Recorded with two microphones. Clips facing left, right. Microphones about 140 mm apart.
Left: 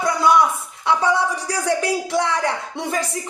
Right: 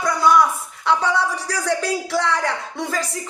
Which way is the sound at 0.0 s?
25° left (ahead or behind).